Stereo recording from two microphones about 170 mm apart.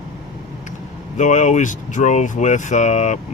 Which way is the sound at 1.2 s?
45° left (ahead or behind).